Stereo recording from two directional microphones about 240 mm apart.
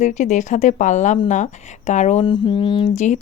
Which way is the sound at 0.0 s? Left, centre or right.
Left.